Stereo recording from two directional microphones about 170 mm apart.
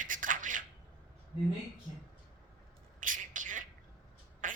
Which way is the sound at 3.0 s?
50° right (ahead or behind).